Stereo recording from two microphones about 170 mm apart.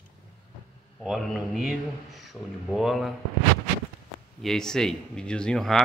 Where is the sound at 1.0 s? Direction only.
Centre (ahead or behind).